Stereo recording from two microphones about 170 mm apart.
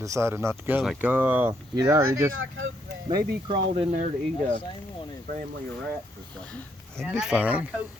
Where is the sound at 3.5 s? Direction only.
30° right (ahead or behind).